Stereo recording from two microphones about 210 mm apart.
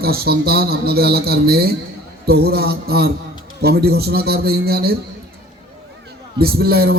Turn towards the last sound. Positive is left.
turn(degrees=-50)  # may be behind; listen again after turning